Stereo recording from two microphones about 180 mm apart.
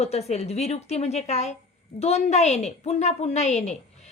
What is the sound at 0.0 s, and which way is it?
A woman's voice, 35° left (ahead or behind).